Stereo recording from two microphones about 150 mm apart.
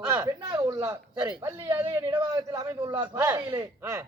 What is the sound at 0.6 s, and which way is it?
A man's voice, 20° right (ahead or behind).